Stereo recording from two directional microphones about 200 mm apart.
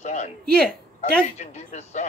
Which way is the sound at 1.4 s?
35° left (ahead or behind).